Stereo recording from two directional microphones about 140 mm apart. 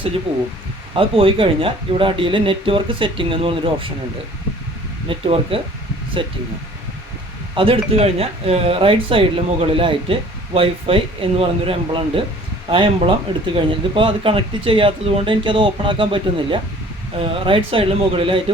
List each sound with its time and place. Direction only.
0.9 s speech: 40° right (ahead or behind)
5.0 s speech: 40° right (ahead or behind)
7.5 s speech: 40° right (ahead or behind)